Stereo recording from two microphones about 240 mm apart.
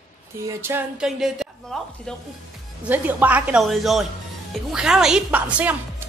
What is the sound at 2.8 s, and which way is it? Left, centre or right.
A woman's voice, centre.